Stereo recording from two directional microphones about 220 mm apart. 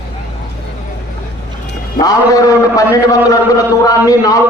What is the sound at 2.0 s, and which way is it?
Speech, 15° left (ahead or behind).